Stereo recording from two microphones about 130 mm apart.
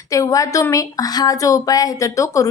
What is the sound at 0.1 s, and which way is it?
A woman's voice, 25° left (ahead or behind).